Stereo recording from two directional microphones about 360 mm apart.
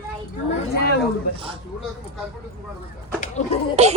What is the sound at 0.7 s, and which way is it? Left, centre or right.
Speech, left.